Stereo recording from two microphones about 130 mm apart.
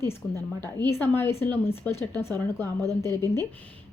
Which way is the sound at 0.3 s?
20° left (ahead or behind).